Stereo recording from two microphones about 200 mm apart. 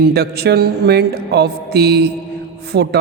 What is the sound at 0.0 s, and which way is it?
A man's voice, 55° right (ahead or behind).